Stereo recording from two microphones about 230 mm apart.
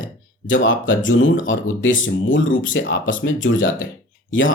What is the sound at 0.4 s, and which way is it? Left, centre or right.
Speech, left.